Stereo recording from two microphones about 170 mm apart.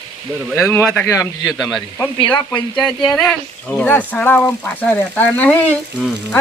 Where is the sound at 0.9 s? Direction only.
5° left (ahead or behind).